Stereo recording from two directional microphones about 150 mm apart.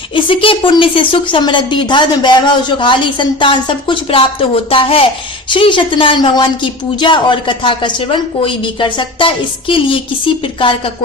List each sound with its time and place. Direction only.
0.1 s a woman's voice: 35° left (ahead or behind)